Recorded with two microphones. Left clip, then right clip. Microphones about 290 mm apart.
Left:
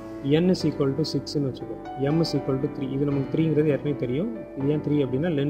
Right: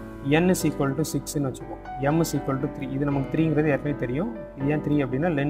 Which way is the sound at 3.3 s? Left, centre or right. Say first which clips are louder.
Even; right.